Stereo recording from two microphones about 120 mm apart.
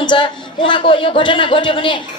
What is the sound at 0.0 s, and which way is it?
A man's voice, 40° left (ahead or behind).